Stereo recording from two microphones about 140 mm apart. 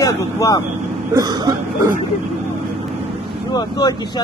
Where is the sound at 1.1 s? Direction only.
30° right (ahead or behind).